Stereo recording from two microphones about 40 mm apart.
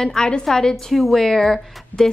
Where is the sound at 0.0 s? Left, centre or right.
Centre.